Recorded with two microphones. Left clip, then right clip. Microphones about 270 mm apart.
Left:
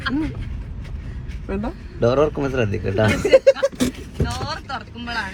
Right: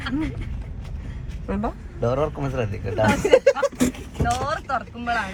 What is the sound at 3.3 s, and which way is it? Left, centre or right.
Speech, right.